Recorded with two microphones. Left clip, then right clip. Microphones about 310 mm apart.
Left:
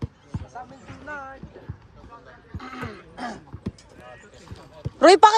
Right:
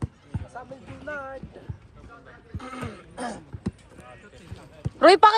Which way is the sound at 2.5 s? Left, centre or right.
Centre.